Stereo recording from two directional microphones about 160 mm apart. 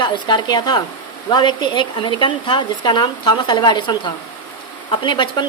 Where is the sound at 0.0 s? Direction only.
30° left (ahead or behind).